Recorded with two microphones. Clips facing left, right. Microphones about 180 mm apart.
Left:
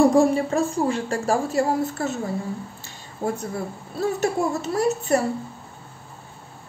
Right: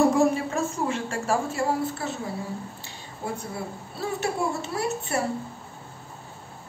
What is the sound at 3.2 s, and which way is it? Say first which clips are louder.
A woman's voice: left 6 dB; 45° left (ahead or behind).